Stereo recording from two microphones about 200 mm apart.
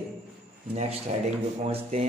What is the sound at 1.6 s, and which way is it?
Speech, 30° right (ahead or behind).